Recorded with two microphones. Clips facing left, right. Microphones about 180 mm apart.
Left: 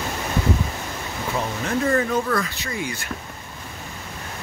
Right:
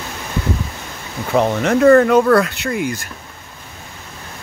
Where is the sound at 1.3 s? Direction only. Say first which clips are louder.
Right 10 dB; 75° right (ahead or behind); by 3.0 s 60° right (ahead or behind).